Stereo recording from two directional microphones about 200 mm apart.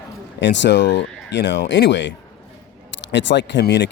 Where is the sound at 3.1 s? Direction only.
65° left (ahead or behind).